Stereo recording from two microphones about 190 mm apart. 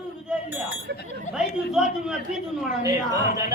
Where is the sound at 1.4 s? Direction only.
5° right (ahead or behind).